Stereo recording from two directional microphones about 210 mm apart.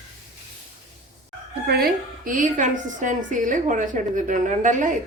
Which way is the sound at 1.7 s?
45° right (ahead or behind).